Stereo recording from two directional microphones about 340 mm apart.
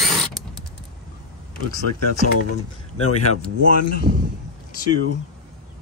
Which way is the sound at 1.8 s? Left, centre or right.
Left.